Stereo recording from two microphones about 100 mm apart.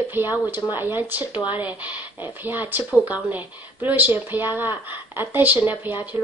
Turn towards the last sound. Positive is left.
turn(degrees=-20)  # may be behind; listen again after turning